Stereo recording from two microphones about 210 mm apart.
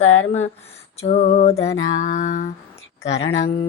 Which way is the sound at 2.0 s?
35° left (ahead or behind).